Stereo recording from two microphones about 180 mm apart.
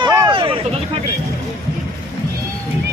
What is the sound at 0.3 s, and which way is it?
Hubbub, 30° right (ahead or behind).